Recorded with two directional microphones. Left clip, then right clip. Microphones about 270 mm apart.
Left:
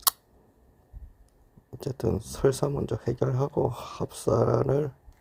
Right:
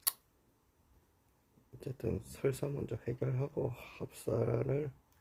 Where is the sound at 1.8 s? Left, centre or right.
Centre.